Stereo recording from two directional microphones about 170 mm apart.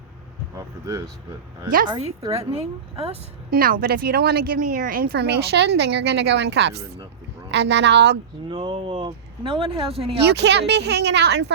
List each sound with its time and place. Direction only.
0.5 s a sound: 20° right (ahead or behind)
1.9 s speech: 35° right (ahead or behind)
3.5 s speech: 55° right (ahead or behind); by 8.2 s 80° right
8.4 s speech: 30° right (ahead or behind)
10.2 s speech: 90° right